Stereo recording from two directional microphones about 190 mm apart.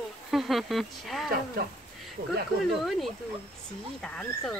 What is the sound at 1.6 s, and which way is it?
Speech, 55° right (ahead or behind).